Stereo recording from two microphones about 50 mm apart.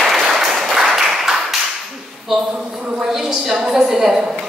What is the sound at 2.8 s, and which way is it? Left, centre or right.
Speech, centre.